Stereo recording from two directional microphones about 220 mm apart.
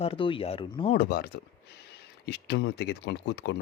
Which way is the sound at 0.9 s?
45° left (ahead or behind).